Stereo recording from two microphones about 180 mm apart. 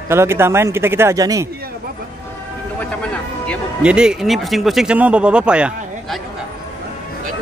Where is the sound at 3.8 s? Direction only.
5° right (ahead or behind).